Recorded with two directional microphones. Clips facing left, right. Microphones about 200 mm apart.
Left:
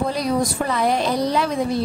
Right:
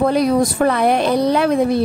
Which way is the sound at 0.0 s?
60° right (ahead or behind).